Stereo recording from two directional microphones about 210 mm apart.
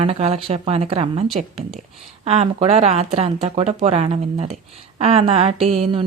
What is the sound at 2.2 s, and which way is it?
A woman's voice, 30° right (ahead or behind).